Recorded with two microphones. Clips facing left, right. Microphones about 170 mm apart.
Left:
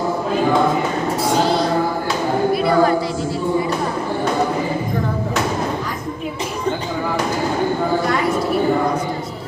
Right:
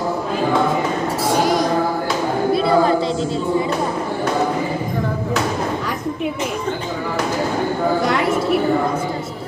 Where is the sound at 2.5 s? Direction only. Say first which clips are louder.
Right 1 dB; 25° right (ahead or behind).